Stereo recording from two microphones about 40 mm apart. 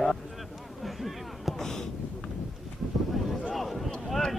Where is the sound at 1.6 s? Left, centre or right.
Centre.